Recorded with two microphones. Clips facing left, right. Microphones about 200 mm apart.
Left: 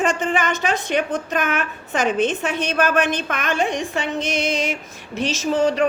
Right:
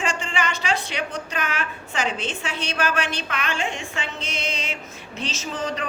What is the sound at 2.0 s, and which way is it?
A woman's voice, 55° left (ahead or behind).